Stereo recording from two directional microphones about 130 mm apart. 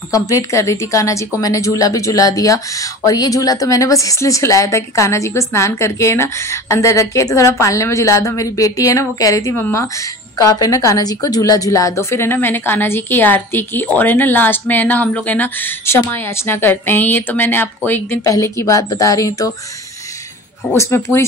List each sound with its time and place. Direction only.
0.1 s a woman's voice: 25° left (ahead or behind)
20.7 s a woman's voice: 20° left (ahead or behind)